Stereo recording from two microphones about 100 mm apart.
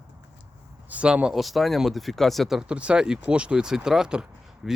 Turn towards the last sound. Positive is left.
turn(degrees=-5)  # may be behind; listen again after turning